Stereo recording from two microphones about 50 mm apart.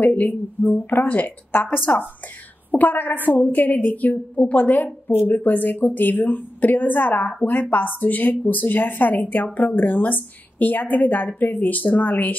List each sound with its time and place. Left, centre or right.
0.0 s a woman's voice: left